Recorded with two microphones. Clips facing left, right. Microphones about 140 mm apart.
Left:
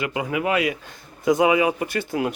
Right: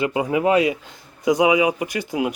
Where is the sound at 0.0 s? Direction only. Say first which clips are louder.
Right 5 dB; 30° right (ahead or behind).